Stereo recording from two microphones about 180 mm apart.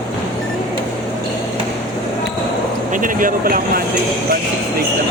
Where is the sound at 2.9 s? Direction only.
50° right (ahead or behind).